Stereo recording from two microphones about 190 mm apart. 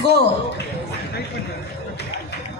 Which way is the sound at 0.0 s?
60° right (ahead or behind).